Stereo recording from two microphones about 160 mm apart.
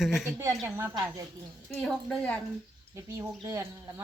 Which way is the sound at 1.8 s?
5° left (ahead or behind).